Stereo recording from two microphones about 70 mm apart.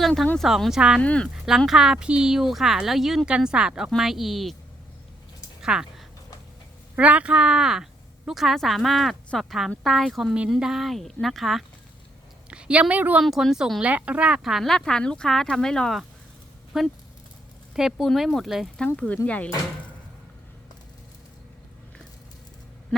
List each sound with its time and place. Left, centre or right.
0.0 s speech: centre
0.8 s speech: centre
1.0 s speech: centre
1.3 s speech: centre
5.6 s a sound: centre
6.9 s speech: centre
12.5 s a woman's voice: centre
13.2 s speech: centre
13.8 s speech: centre
14.4 s speech: centre
16.7 s speech: centre
18.9 s speech: centre